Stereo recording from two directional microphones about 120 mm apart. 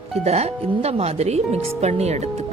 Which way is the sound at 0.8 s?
60° right (ahead or behind).